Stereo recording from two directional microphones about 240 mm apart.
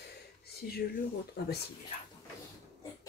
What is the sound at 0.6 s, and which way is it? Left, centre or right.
Speech, left.